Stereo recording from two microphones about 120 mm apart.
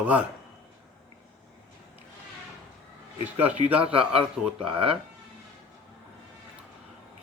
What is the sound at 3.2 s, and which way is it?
Speech, 15° right (ahead or behind).